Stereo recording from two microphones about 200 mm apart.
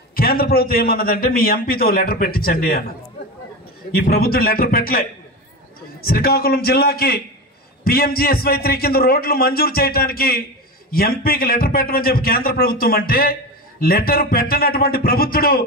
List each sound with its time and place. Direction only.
0.1 s a man's voice: 50° left (ahead or behind)
3.9 s a man's voice: 50° left (ahead or behind)
6.0 s a man's voice: 50° left (ahead or behind)